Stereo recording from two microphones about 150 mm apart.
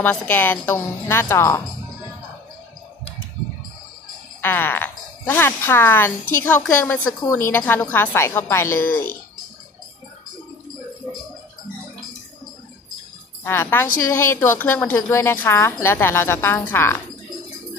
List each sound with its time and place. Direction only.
0.0 s a woman's voice: 10° left (ahead or behind)
4.4 s a woman's voice: 15° left (ahead or behind)
13.4 s a woman's voice: 15° left (ahead or behind)